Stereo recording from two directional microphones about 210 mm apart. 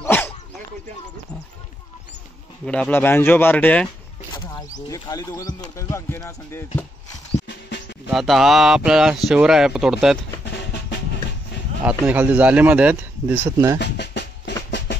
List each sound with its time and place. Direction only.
0.0 s dog: 10° left (ahead or behind)
2.6 s speech: 5° left (ahead or behind)
4.8 s speech: 15° left (ahead or behind)
8.1 s speech: centre (ahead or behind)
10.4 s music: 55° left (ahead or behind)
11.8 s speech: 5° right (ahead or behind)
13.7 s music: 55° left (ahead or behind)